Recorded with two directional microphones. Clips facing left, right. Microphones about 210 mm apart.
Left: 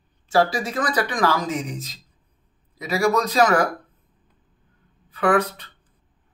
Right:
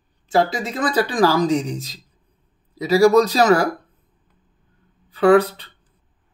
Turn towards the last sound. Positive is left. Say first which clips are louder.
# right 6 dB
turn(degrees=-30)  # may be behind; listen again after turning